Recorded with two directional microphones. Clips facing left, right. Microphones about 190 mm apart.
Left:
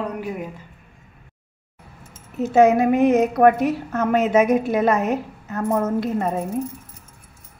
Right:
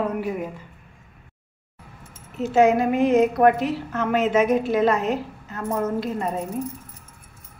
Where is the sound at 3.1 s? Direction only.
45° left (ahead or behind); by 6.2 s 60° left (ahead or behind).